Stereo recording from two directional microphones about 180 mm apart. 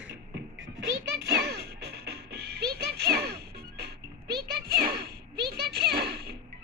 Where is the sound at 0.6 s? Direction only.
70° right (ahead or behind).